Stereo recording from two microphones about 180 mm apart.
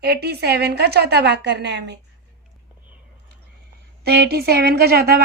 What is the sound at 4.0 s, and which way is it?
A woman's voice, 60° right (ahead or behind).